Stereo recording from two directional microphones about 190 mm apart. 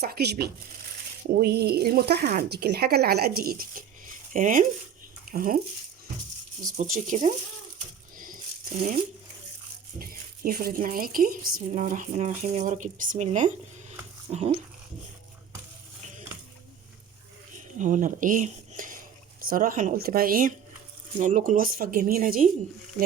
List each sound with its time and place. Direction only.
0.0 s speech: 55° right (ahead or behind)
6.7 s speech: 45° right (ahead or behind)
10.0 s speech: 50° right (ahead or behind); by 14.5 s 35° right (ahead or behind)
17.5 s speech: 40° right (ahead or behind)